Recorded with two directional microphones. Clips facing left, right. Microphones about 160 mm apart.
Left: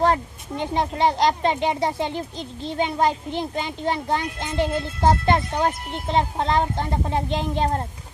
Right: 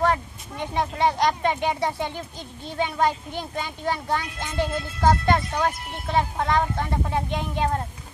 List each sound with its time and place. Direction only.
0.0 s speech: 30° left (ahead or behind)